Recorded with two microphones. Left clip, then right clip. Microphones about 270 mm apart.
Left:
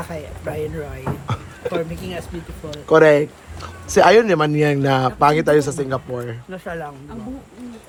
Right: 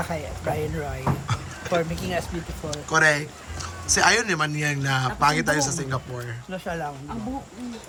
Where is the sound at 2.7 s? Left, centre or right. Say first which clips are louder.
Left 8 dB; centre.